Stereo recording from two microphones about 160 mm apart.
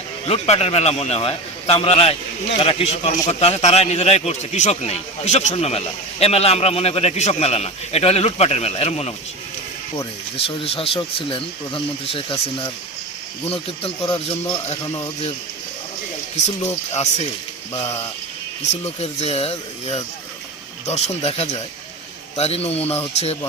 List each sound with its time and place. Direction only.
0.3 s speech: 40° left (ahead or behind)
10.3 s speech: 35° left (ahead or behind)
14.3 s speech: 35° left (ahead or behind)
16.4 s speech: 45° left (ahead or behind)
18.7 s speech: 40° left (ahead or behind)